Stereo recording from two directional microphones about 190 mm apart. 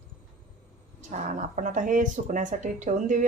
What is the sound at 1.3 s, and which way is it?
Speech, 40° right (ahead or behind).